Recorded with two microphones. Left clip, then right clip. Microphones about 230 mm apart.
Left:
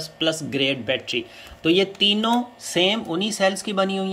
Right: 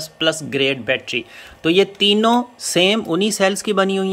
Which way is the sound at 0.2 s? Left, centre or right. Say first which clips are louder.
Right 4 dB; centre.